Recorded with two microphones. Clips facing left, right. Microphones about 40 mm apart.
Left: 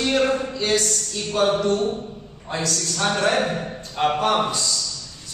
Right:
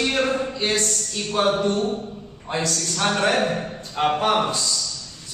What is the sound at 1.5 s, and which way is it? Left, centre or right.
Speech, centre.